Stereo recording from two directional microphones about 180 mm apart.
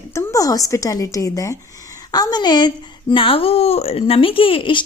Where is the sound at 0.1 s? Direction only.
15° left (ahead or behind).